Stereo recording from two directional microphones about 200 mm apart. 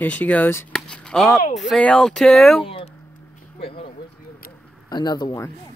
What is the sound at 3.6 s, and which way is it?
Speech, 30° left (ahead or behind).